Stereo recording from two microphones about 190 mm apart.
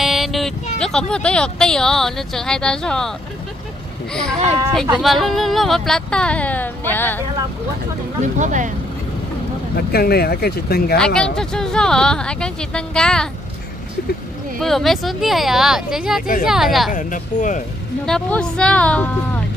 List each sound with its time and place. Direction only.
0.0 s a sound: centre (ahead or behind)
0.7 s speech: 5° left (ahead or behind)
8.2 s speech: 40° right (ahead or behind)
9.8 s speech: 55° left (ahead or behind)
11.1 s speech: 5° left (ahead or behind)
14.6 s speech: centre (ahead or behind)
16.9 s speech: 40° left (ahead or behind)
18.0 s speech: 5° left (ahead or behind)